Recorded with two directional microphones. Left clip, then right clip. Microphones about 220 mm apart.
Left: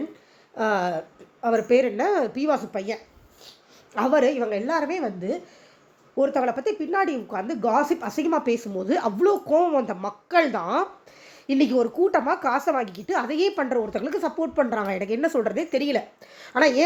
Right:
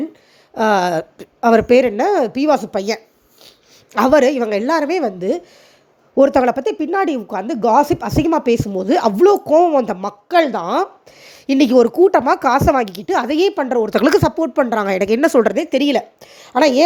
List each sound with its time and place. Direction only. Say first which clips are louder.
0.5 s speech: right 9 dB; 35° right (ahead or behind)
13.8 s speech: right 13 dB; 50° right (ahead or behind); by 16.8 s 30° right (ahead or behind)